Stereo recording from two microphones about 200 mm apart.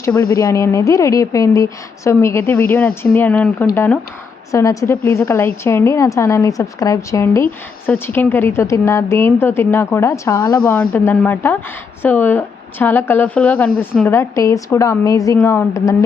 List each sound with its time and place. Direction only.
0.3 s a woman's voice: 15° left (ahead or behind)